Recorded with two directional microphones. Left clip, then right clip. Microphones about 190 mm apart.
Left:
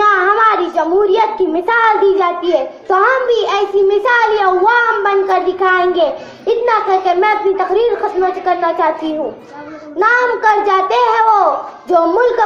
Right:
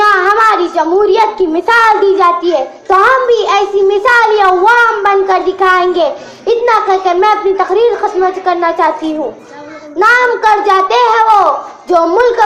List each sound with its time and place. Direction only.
0.0 s a child's voice: 30° right (ahead or behind)
10.0 s a child's voice: 30° right (ahead or behind)